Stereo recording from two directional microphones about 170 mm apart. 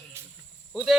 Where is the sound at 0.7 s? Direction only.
5° right (ahead or behind).